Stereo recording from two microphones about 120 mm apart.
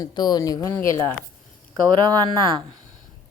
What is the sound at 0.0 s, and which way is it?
Speech, 35° left (ahead or behind).